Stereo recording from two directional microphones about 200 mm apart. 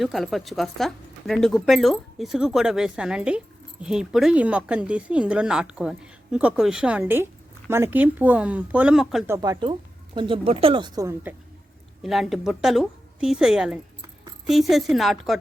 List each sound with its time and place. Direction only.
0.0 s speech: centre (ahead or behind)
9.2 s speech: 15° right (ahead or behind)
12.0 s speech: centre (ahead or behind)